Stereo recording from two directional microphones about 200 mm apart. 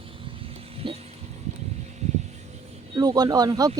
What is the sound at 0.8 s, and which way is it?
Speech, 25° right (ahead or behind).